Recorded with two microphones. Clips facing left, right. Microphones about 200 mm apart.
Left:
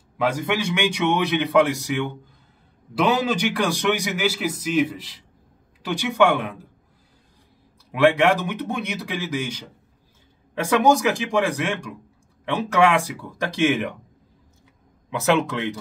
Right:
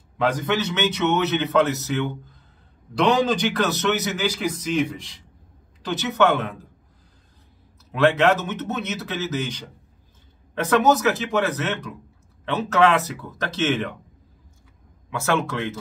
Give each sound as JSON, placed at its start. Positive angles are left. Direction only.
{"t": 0.2, "sound": "a man's voice", "side_deg": 10}
{"t": 7.9, "sound": "a man's voice", "side_deg": 10}
{"t": 15.0, "sound": "a man's voice", "side_deg": 20}